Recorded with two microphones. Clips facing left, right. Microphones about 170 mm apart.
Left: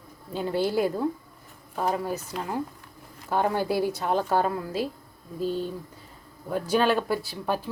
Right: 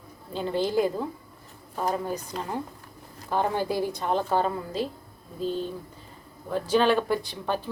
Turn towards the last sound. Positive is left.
turn(degrees=10)  # may be behind; listen again after turning